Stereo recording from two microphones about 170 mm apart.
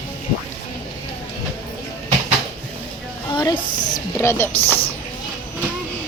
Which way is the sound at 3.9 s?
15° left (ahead or behind).